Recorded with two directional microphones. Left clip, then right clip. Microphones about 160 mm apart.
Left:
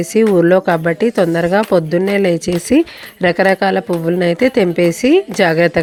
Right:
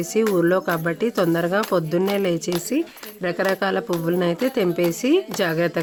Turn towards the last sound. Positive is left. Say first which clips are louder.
# left 9 dB
turn(degrees=40)  # may be behind; listen again after turning